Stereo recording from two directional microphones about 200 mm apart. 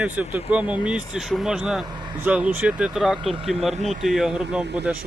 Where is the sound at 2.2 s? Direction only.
5° right (ahead or behind).